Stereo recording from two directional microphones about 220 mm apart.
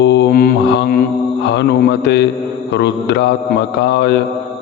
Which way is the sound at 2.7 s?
50° left (ahead or behind).